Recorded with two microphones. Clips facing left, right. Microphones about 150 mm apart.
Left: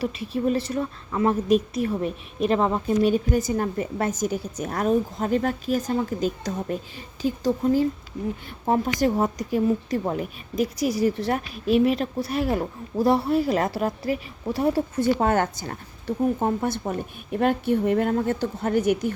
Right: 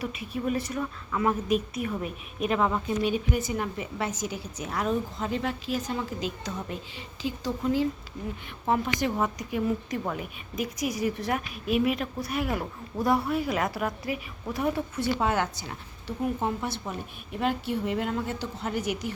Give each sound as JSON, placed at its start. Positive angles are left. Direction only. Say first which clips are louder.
{"t": 0.0, "sound": "a woman's voice", "louder": "left 6 dB", "side_deg": 30}
{"t": 2.9, "sound": "a woman's voice", "louder": "left 6 dB", "side_deg": 40}